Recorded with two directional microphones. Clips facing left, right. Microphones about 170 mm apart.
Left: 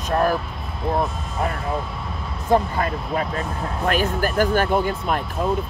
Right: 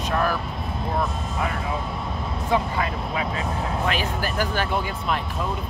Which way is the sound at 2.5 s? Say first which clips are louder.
Left 5 dB; 45° left (ahead or behind).